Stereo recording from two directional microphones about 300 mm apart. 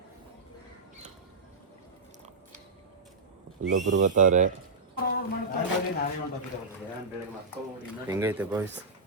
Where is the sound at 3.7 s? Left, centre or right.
Right.